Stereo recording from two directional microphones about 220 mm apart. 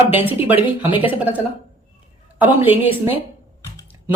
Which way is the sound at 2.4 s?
10° right (ahead or behind).